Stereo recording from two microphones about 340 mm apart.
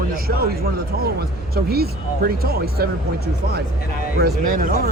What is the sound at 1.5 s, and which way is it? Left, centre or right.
A man's voice, right.